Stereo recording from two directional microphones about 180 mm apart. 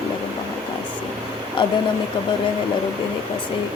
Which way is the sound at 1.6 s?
25° left (ahead or behind).